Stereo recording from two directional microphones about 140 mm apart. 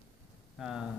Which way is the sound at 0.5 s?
5° right (ahead or behind).